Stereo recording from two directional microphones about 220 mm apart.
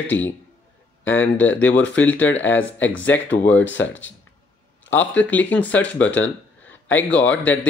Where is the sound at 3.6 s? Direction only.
60° left (ahead or behind).